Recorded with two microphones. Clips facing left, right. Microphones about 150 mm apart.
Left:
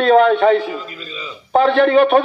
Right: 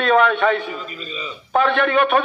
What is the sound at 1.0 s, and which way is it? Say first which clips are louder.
Speech: right 1 dB; centre (ahead or behind).